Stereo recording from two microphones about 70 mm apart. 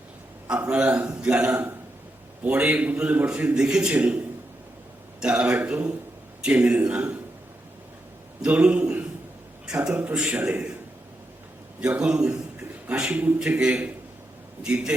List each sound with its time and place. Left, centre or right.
0.4 s a man's voice: centre
5.2 s a man's voice: centre
8.4 s a man's voice: centre
11.9 s a man's voice: centre